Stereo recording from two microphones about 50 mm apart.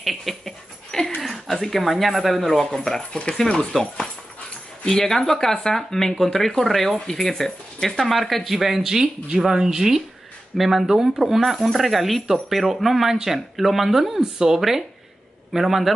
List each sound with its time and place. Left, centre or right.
0.0 s dog: centre
1.2 s speech: centre
3.7 s speech: centre